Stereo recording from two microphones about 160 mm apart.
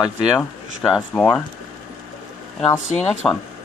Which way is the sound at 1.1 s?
15° left (ahead or behind).